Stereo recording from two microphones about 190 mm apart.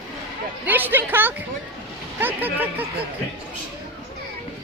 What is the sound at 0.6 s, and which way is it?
Speech, 10° right (ahead or behind).